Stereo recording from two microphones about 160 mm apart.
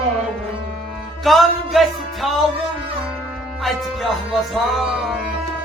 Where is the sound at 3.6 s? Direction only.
Centre (ahead or behind).